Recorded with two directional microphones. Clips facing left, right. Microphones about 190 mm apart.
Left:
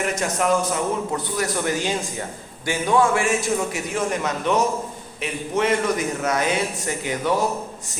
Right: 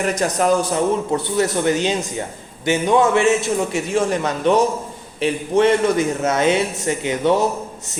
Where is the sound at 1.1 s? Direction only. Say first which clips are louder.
Right 6 dB; 25° right (ahead or behind).